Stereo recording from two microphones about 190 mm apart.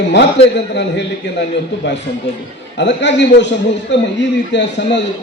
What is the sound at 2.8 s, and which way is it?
Speech, 70° left (ahead or behind).